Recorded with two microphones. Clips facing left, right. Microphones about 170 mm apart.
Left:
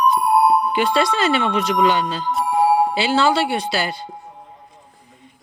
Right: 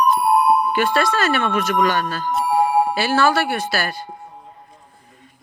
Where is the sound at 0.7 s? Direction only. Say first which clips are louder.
Even; 20° left (ahead or behind).